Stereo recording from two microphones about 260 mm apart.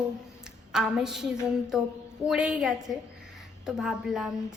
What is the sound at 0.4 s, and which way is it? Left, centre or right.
A woman's voice, centre.